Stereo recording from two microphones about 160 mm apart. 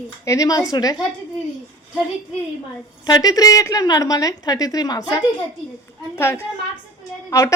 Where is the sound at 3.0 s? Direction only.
25° left (ahead or behind).